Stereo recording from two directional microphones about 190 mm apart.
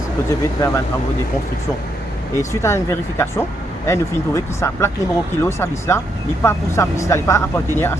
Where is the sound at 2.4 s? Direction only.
15° left (ahead or behind).